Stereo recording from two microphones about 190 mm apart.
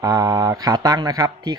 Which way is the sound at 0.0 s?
20° right (ahead or behind).